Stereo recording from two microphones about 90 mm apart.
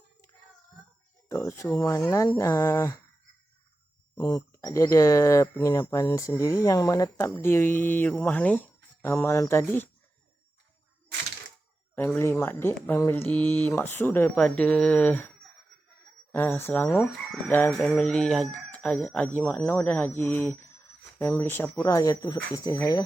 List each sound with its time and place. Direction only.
1.3 s speech: 30° left (ahead or behind)
1.8 s speech: 35° left (ahead or behind)
4.4 s speech: 35° left (ahead or behind)
7.3 s speech: 30° left (ahead or behind)
11.9 s speech: 20° left (ahead or behind)
14.3 s speech: 10° left (ahead or behind)
16.3 s speech: 25° left (ahead or behind)
17.7 s speech: 5° left (ahead or behind); by 21.7 s 25° left (ahead or behind)
21.8 s speech: 35° left (ahead or behind)